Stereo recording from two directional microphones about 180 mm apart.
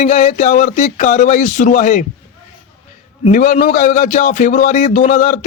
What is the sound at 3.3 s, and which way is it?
Speech, 45° left (ahead or behind).